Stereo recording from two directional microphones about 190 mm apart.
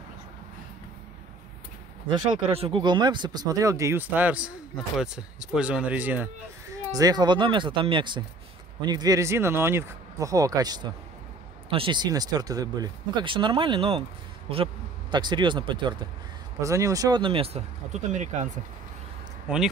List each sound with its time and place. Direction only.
2.4 s speech: 30° right (ahead or behind); by 6.3 s 10° right (ahead or behind)
6.9 s speech: 20° right (ahead or behind); by 18.5 s 40° right (ahead or behind)
19.4 s speech: 5° right (ahead or behind)